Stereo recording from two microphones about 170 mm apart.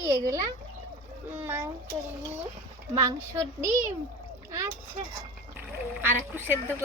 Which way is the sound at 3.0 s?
20° right (ahead or behind).